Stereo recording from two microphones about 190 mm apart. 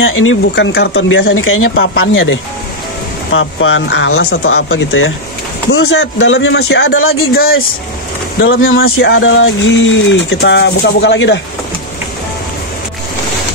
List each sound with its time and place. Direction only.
0.0 s speech: 90° left
5.7 s speech: 75° left (ahead or behind)
7.3 s speech: 55° left (ahead or behind)
8.6 s speech: 90° left; by 11.4 s 70° left (ahead or behind)